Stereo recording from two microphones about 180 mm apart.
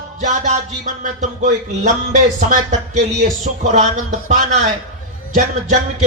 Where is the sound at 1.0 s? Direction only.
45° right (ahead or behind).